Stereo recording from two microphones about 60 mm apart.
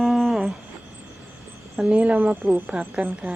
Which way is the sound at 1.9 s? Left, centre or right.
Right.